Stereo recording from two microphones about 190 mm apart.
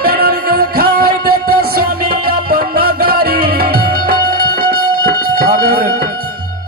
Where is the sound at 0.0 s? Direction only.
55° right (ahead or behind).